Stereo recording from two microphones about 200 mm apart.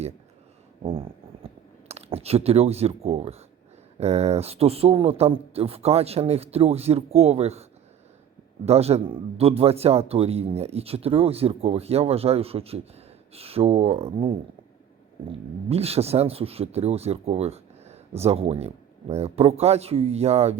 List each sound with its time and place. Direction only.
0.8 s a sound: 25° right (ahead or behind)
1.9 s speech: 30° right (ahead or behind)
15.7 s speech: 30° right (ahead or behind)